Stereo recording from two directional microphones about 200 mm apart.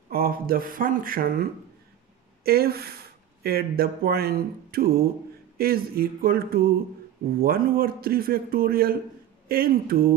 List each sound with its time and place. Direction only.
0.1 s a man's voice: 45° right (ahead or behind)